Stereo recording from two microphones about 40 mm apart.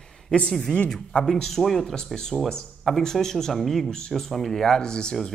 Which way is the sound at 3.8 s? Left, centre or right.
Centre.